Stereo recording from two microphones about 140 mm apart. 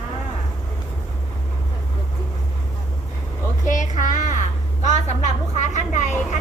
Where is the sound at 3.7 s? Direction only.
65° left (ahead or behind).